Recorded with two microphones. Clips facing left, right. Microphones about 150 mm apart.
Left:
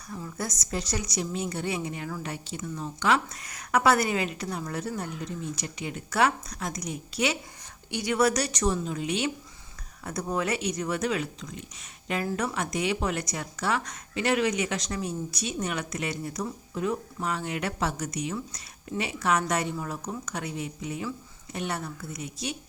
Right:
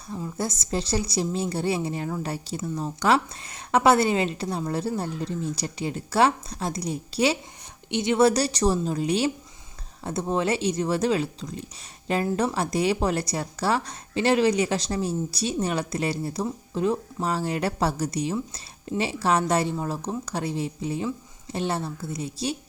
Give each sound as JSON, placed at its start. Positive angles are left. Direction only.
{"t": 0.1, "sound": "speech", "side_deg": -25}